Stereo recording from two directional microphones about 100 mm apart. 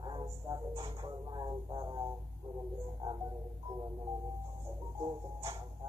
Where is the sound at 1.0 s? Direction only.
45° right (ahead or behind).